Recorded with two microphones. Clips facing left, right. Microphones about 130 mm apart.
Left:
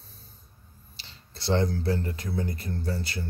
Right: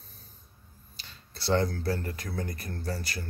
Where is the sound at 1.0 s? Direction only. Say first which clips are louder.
Even; 20° left (ahead or behind).